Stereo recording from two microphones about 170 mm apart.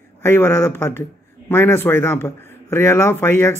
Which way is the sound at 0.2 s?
15° left (ahead or behind).